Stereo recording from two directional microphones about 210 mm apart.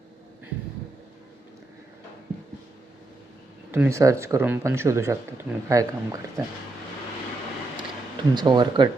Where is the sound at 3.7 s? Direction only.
10° right (ahead or behind).